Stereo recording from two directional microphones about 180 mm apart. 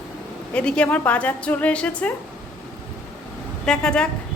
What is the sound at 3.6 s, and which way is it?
Speech, 5° left (ahead or behind).